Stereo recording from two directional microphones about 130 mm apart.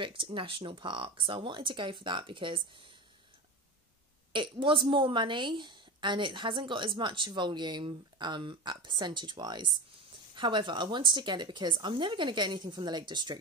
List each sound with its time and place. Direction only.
0.0 s a woman's voice: 40° right (ahead or behind)
4.3 s a woman's voice: 40° right (ahead or behind)